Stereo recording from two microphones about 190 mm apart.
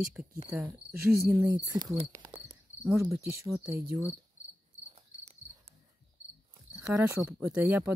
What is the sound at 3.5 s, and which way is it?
Speech, 10° right (ahead or behind).